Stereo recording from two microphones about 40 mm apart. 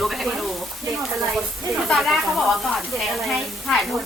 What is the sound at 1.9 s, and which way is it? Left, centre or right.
Speech, centre.